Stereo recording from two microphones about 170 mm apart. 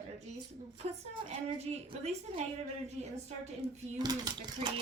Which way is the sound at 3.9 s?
25° right (ahead or behind).